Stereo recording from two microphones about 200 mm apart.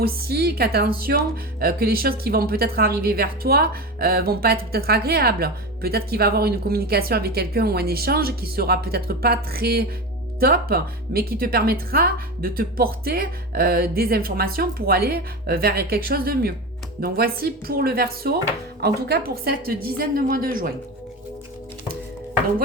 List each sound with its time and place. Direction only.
0.0 s a woman's voice: 50° right (ahead or behind)